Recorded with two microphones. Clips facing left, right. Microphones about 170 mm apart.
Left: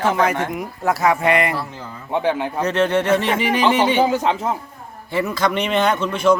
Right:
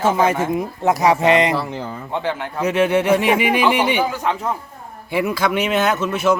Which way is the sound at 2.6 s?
10° right (ahead or behind).